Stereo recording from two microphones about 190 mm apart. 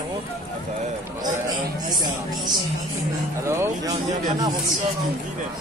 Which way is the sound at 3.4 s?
15° right (ahead or behind).